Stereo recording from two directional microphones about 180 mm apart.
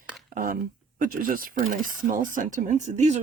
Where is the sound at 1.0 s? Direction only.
50° right (ahead or behind).